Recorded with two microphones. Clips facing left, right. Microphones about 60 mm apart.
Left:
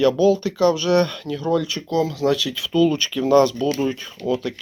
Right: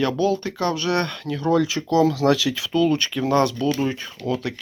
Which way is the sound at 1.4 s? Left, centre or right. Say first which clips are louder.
Right 2 dB; right.